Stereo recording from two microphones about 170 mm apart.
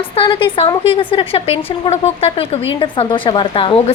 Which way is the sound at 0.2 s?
30° left (ahead or behind).